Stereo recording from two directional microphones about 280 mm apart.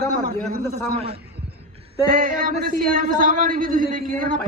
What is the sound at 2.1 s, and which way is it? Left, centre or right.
Speech, right.